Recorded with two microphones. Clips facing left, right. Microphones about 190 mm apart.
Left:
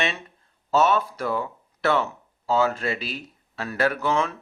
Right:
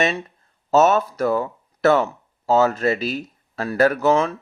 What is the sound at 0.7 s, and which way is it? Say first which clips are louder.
Speech: right 5 dB; 45° right (ahead or behind).